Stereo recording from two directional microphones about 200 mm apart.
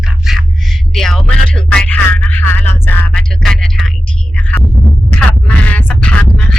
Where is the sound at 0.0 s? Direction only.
Centre (ahead or behind).